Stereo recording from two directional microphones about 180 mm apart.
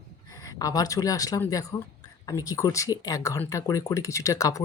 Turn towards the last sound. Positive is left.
turn(degrees=20)  # may be behind; listen again after turning